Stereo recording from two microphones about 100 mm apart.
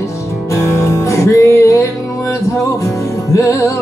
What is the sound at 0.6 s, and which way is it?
Music, 30° left (ahead or behind).